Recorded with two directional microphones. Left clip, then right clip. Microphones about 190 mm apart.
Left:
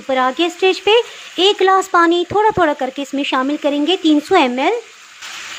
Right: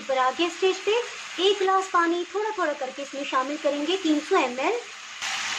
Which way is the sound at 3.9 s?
45° left (ahead or behind).